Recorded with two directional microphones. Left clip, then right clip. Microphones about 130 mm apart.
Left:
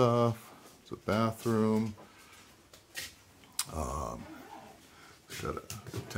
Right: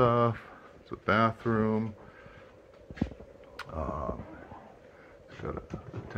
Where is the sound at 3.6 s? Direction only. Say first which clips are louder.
Right 1 dB; 25° left (ahead or behind).